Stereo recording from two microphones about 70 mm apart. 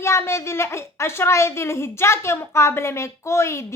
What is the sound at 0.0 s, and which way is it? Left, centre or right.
A woman's voice, left.